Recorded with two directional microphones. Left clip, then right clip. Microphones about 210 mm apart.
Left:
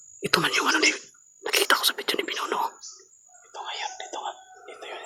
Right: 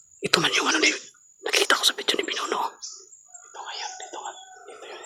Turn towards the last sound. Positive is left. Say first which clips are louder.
# left 2 dB
turn(degrees=35)  # may be behind; listen again after turning